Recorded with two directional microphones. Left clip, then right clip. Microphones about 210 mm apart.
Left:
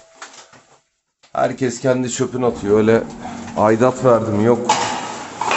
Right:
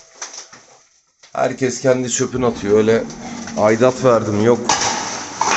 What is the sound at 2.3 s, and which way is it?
Speech, 10° left (ahead or behind).